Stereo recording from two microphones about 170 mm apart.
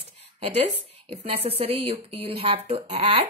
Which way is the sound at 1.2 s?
35° right (ahead or behind).